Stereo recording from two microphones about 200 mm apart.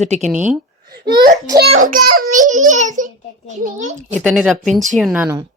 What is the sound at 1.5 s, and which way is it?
A child's voice, 50° right (ahead or behind).